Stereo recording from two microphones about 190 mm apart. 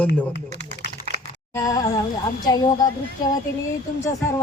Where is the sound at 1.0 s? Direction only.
45° left (ahead or behind).